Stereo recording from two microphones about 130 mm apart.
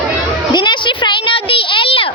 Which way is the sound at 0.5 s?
35° left (ahead or behind).